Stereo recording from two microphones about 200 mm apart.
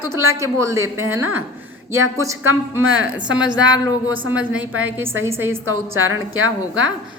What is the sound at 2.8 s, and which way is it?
Speech, 80° right.